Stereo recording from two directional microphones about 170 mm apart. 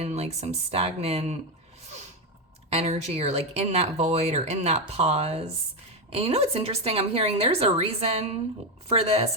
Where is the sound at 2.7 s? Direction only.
40° right (ahead or behind).